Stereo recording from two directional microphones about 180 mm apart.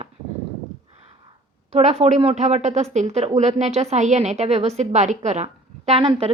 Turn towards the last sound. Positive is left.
turn(degrees=-30)  # may be behind; listen again after turning